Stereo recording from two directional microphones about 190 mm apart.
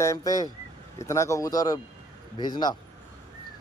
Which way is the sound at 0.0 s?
15° left (ahead or behind).